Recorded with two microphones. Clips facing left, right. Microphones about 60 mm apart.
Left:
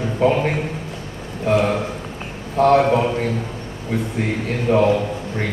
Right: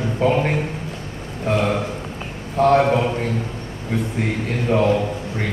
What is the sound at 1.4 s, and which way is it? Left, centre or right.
Speech, left.